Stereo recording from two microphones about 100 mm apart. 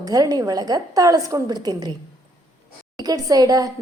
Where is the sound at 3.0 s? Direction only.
40° right (ahead or behind).